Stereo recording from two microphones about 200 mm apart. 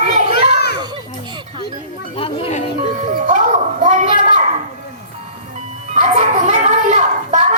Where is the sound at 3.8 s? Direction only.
40° right (ahead or behind).